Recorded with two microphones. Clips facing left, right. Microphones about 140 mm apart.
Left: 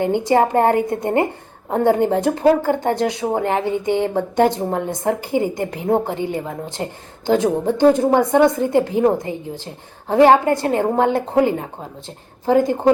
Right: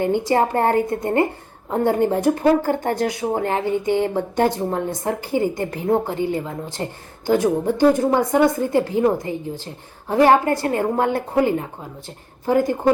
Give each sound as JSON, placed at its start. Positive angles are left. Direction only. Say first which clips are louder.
{"t": 0.0, "sound": "speech", "louder": "left 2 dB", "side_deg": 20}